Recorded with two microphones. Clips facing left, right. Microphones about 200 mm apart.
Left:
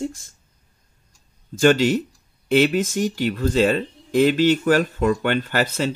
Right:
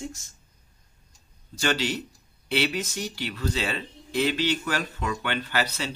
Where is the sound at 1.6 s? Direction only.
45° left (ahead or behind).